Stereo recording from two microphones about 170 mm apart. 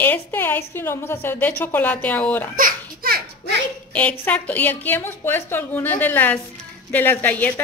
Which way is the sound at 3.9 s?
10° left (ahead or behind).